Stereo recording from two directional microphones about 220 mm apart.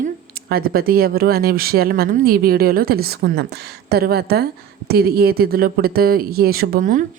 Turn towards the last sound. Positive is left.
turn(degrees=-40)  # may be behind; listen again after turning